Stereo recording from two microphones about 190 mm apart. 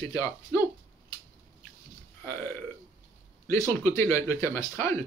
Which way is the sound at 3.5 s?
15° left (ahead or behind).